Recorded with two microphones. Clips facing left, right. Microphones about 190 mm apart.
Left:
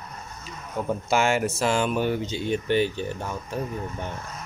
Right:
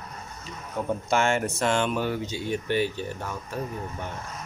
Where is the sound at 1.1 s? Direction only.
5° left (ahead or behind).